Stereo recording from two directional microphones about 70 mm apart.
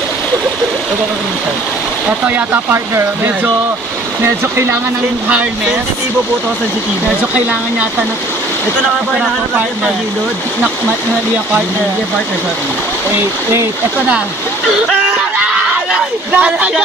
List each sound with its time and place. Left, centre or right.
2.0 s speech: right
4.2 s speech: right
15.3 s a sound: centre